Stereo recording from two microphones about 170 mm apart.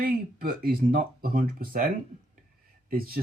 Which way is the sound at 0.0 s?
60° right (ahead or behind).